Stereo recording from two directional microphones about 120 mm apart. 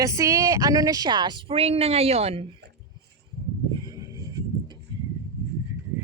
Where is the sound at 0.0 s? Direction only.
25° right (ahead or behind); by 2.5 s 55° right (ahead or behind).